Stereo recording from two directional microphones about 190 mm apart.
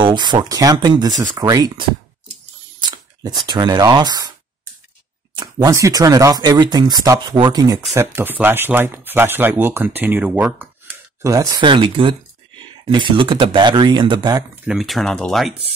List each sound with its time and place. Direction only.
0.0 s speech: 25° right (ahead or behind)
5.3 s speech: 20° right (ahead or behind)
14.5 s speech: centre (ahead or behind)